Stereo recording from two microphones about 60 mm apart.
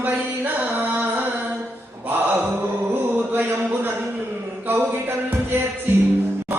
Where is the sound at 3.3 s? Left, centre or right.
Right.